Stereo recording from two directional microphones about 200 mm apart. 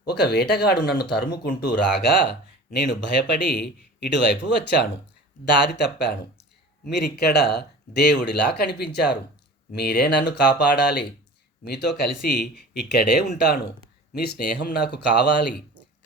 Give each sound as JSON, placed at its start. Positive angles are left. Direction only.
{"t": 0.1, "sound": "speech", "side_deg": 55}